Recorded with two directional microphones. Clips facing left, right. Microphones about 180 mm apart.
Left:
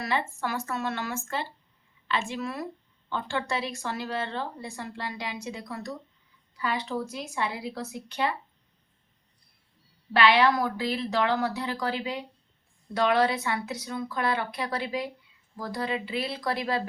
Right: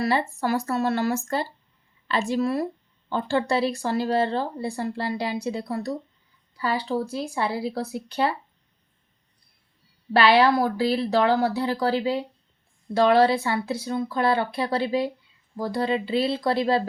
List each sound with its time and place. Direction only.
0.0 s speech: 35° right (ahead or behind)
10.1 s speech: 35° right (ahead or behind)